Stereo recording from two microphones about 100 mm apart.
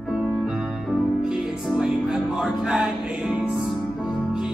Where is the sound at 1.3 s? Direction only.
5° right (ahead or behind).